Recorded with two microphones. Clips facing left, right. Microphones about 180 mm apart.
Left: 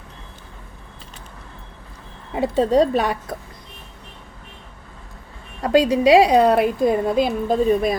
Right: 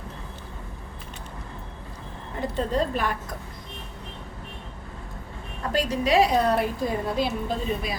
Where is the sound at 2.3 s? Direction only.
90° left.